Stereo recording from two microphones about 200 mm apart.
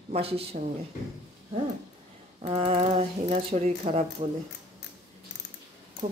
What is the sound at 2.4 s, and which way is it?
Speech, 30° right (ahead or behind).